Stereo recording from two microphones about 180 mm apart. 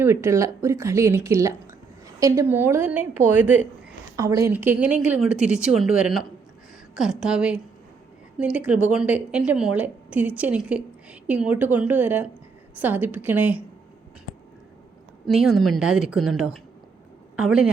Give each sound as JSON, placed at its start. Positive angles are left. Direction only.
{"t": 0.0, "sound": "a woman's voice", "side_deg": -15}
{"t": 15.3, "sound": "a woman's voice", "side_deg": 0}